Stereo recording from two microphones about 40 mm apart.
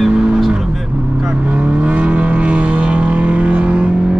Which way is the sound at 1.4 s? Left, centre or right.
Right.